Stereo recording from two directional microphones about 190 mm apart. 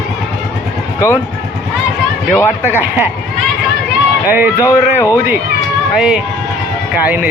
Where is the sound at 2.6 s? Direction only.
10° right (ahead or behind).